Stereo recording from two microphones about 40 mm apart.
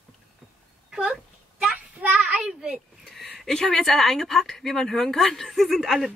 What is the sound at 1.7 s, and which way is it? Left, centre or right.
Speech, right.